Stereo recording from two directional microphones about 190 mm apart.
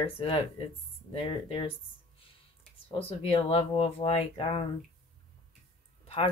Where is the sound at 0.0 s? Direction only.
30° left (ahead or behind).